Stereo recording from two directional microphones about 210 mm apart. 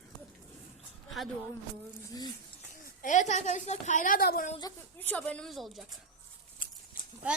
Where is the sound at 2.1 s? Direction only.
20° left (ahead or behind).